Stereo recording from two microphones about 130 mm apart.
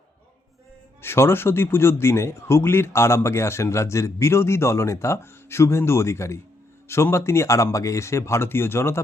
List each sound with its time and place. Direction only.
1.0 s speech: 20° left (ahead or behind)